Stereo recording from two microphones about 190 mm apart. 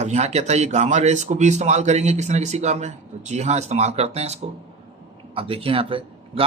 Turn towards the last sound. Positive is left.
turn(degrees=-30)  # may be behind; listen again after turning